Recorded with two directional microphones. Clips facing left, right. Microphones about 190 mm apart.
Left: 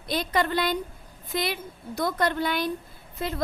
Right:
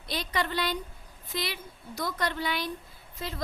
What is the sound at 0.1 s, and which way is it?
A woman's voice, 50° left (ahead or behind).